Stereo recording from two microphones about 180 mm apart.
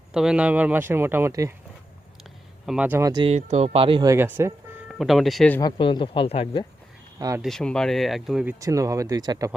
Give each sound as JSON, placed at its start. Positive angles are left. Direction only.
{"t": 0.1, "sound": "speech", "side_deg": -5}
{"t": 2.6, "sound": "speech", "side_deg": -5}
{"t": 3.1, "sound": "speech", "side_deg": -30}
{"t": 4.1, "sound": "speech", "side_deg": -15}
{"t": 4.9, "sound": "speech", "side_deg": 0}
{"t": 5.5, "sound": "speech", "side_deg": 25}
{"t": 7.2, "sound": "speech", "side_deg": -20}
{"t": 7.4, "sound": "speech", "side_deg": 5}
{"t": 8.5, "sound": "speech", "side_deg": -20}